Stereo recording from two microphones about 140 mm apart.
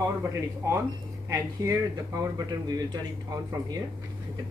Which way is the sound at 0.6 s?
15° right (ahead or behind).